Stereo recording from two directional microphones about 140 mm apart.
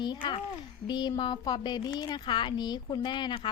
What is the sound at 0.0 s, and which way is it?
Speech, 35° left (ahead or behind).